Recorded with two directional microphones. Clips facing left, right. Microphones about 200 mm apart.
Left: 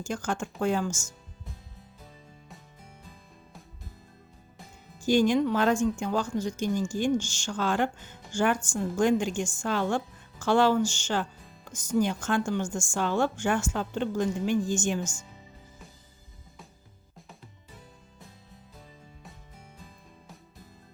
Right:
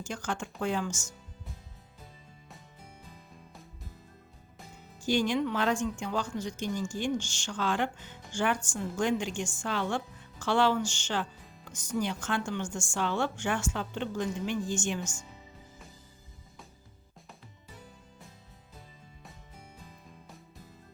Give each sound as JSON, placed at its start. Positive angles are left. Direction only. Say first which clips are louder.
{"t": 0.0, "sound": "speech", "louder": "left 4 dB", "side_deg": 45}
{"t": 5.0, "sound": "speech", "louder": "left 5 dB", "side_deg": 45}